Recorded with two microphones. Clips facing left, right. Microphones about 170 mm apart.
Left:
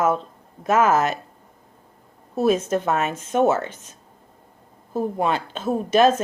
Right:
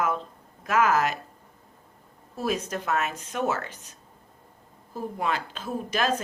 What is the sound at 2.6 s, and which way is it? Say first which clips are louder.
Speech: left 6 dB; 25° left (ahead or behind).